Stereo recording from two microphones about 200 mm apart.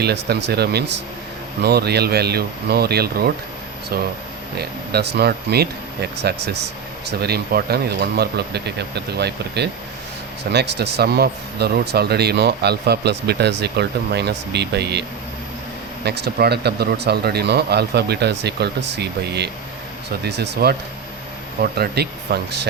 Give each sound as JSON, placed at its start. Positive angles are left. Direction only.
{"t": 0.0, "sound": "speech", "side_deg": -55}
{"t": 4.5, "sound": "speech", "side_deg": -55}
{"t": 16.0, "sound": "speech", "side_deg": -55}